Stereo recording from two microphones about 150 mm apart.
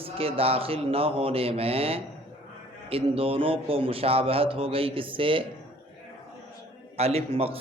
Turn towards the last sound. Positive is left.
turn(degrees=-40)  # may be behind; listen again after turning